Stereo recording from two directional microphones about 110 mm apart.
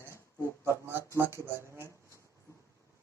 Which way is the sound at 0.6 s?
20° right (ahead or behind).